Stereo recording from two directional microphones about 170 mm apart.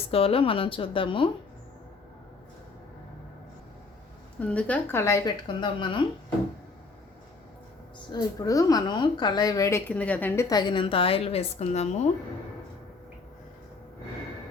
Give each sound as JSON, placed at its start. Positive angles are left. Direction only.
{"t": 0.1, "sound": "speech", "side_deg": 35}
{"t": 4.4, "sound": "speech", "side_deg": 10}
{"t": 8.1, "sound": "a woman's voice", "side_deg": 20}
{"t": 10.5, "sound": "speech", "side_deg": 25}